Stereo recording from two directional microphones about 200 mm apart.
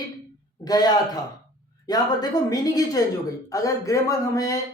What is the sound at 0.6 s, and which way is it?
A woman's voice, 20° left (ahead or behind).